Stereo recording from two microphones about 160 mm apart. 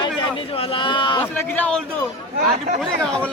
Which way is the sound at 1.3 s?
10° left (ahead or behind).